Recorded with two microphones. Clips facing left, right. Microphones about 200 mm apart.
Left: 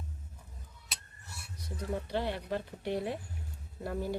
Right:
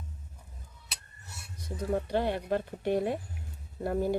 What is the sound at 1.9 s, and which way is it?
Speech, 50° right (ahead or behind).